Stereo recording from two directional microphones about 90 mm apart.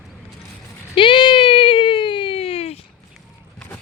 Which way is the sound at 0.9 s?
65° left (ahead or behind).